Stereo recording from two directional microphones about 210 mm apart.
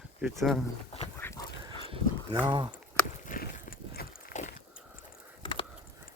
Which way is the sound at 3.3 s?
40° left (ahead or behind).